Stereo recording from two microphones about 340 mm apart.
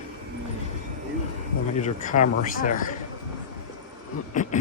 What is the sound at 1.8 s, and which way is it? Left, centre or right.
Speech, left.